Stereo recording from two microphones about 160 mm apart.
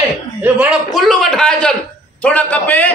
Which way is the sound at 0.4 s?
5° right (ahead or behind).